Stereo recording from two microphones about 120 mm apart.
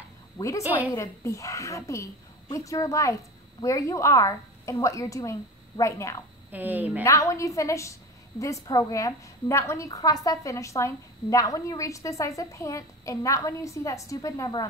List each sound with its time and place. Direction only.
0.4 s a woman's voice: 25° left (ahead or behind)
6.5 s a woman's voice: 15° right (ahead or behind)
7.0 s a woman's voice: 25° left (ahead or behind)